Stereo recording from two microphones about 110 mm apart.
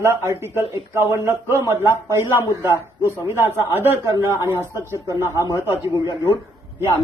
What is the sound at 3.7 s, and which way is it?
Speech, 20° right (ahead or behind).